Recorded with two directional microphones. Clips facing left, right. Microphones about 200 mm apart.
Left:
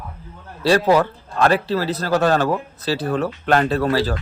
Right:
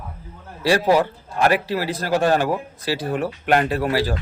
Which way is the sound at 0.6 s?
10° right (ahead or behind).